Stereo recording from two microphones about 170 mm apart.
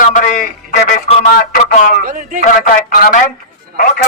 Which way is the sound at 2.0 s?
50° right (ahead or behind).